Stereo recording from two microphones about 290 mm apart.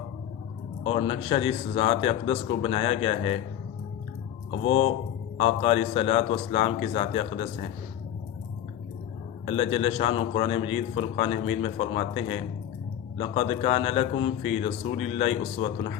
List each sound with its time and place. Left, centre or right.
0.9 s a man's voice: centre
4.6 s a man's voice: left
9.7 s a man's voice: left